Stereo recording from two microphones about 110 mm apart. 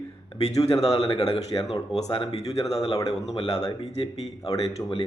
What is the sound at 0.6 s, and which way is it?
Speech, 70° left (ahead or behind).